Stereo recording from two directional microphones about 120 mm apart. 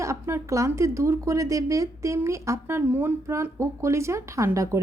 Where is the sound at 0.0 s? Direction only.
25° right (ahead or behind).